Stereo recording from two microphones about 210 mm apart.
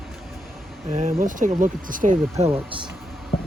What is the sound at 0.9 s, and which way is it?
Speech, 35° right (ahead or behind).